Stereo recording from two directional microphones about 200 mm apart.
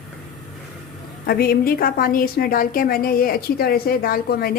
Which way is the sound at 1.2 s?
50° left (ahead or behind).